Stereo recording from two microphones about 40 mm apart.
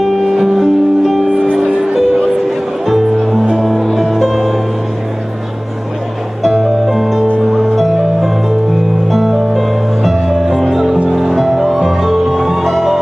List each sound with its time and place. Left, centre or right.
0.0 s music: centre
1.6 s music: centre
2.0 s music: centre
6.4 s music: centre